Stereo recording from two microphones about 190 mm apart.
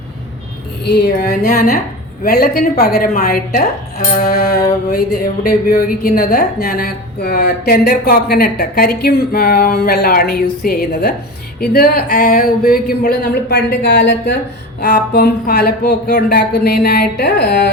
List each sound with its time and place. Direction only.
0.9 s a woman's voice: 60° left (ahead or behind)